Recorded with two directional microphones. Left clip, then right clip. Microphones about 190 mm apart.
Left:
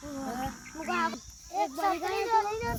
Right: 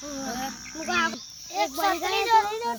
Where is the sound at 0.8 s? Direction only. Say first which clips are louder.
Right 5 dB; 10° right (ahead or behind).